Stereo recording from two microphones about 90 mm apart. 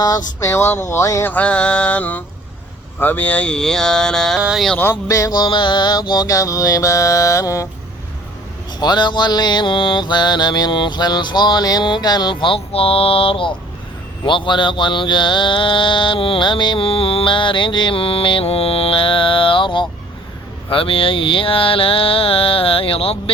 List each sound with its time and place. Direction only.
0.0 s speech: 45° left (ahead or behind)
0.5 s mantra: 30° left (ahead or behind)
1.2 s mantra: 15° left (ahead or behind)
4.4 s speech: 5° right (ahead or behind)
5.0 s mantra: 40° left (ahead or behind)
8.8 s mantra: 55° left (ahead or behind); by 13.5 s 80° left
14.3 s mantra: 60° left (ahead or behind)
20.7 s a sound: 80° left